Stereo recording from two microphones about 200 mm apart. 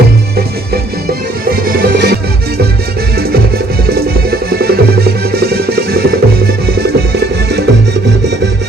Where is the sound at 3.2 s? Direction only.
50° right (ahead or behind).